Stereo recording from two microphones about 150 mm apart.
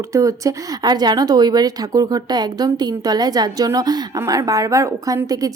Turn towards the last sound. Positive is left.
turn(degrees=-25)  # may be behind; listen again after turning